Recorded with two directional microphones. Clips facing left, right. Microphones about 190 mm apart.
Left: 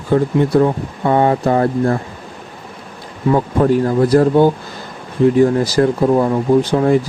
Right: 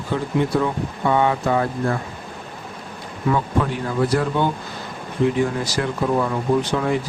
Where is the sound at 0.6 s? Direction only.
40° left (ahead or behind).